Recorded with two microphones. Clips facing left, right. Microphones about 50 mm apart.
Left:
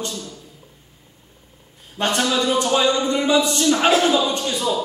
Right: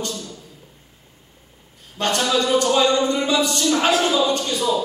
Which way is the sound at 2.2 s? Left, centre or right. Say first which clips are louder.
Right 4 dB; centre.